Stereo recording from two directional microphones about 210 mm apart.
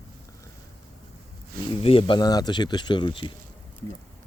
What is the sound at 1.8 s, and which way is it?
Speech, 25° left (ahead or behind).